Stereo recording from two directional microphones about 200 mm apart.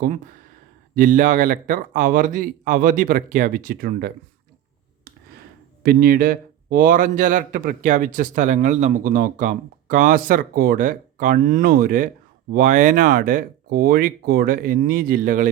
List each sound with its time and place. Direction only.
0.0 s a man's voice: 45° right (ahead or behind)
5.8 s a man's voice: 50° right (ahead or behind)